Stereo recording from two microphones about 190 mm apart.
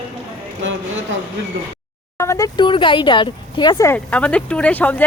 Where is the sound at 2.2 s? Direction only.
15° left (ahead or behind).